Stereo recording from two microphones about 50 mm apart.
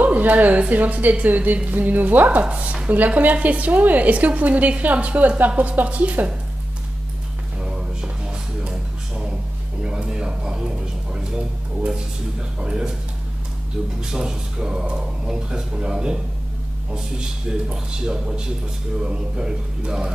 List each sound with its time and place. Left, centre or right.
0.0 s a woman's voice: right
7.6 s a sound: centre
14.1 s speech: centre